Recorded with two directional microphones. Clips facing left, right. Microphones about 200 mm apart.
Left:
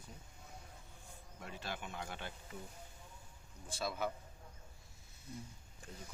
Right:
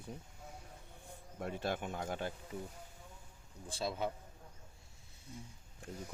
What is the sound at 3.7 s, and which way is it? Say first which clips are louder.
Speech: right 2 dB; 30° right (ahead or behind).